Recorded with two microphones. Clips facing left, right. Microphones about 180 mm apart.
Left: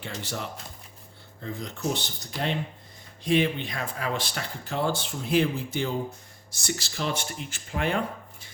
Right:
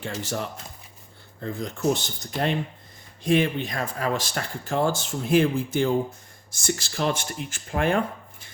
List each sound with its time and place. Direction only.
0.0 s speech: 45° right (ahead or behind)